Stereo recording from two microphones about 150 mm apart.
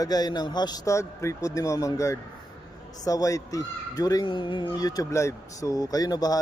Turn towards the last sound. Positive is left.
turn(degrees=25)  # may be behind; listen again after turning